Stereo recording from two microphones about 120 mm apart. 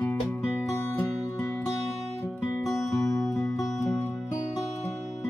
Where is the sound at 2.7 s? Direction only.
25° left (ahead or behind).